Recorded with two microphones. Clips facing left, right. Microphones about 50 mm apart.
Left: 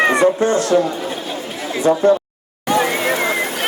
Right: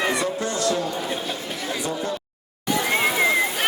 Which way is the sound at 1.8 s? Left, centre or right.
Left.